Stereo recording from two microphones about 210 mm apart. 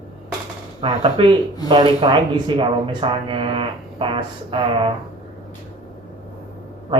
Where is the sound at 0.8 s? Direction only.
25° right (ahead or behind).